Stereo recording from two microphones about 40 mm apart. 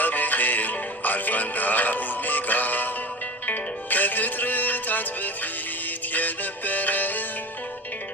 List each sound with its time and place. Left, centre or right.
0.0 s music: left